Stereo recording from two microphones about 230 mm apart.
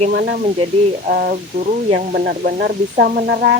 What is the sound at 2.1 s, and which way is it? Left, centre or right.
Speech, right.